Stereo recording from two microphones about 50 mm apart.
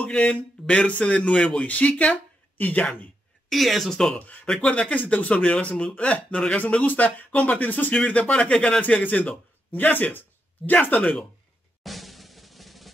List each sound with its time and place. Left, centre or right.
0.0 s speech: left
3.4 s speech: centre
3.9 s speech: centre; by 7.9 s left
7.9 s speech: centre
8.8 s speech: left
11.0 s speech: centre
11.8 s music: centre